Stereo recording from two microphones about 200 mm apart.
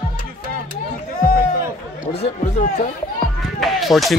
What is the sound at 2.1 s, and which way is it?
Speech, 30° left (ahead or behind).